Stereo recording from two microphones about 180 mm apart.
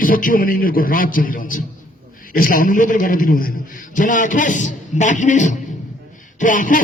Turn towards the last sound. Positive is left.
turn(degrees=45)  # may be behind; listen again after turning